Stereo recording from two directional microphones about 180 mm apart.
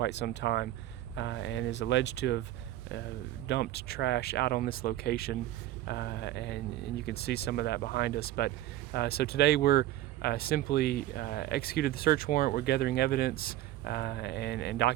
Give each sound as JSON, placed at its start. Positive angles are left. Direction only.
{"t": 0.0, "sound": "speech", "side_deg": 75}
{"t": 3.4, "sound": "speech", "side_deg": 65}